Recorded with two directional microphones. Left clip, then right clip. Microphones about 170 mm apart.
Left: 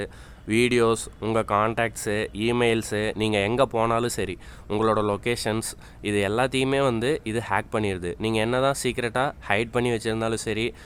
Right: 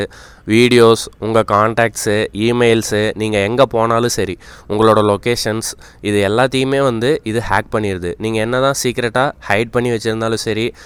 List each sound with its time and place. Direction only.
0.0 s speech: 40° right (ahead or behind)